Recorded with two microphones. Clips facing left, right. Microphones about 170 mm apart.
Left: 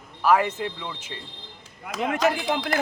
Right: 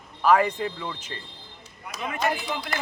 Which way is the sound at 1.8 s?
90° left.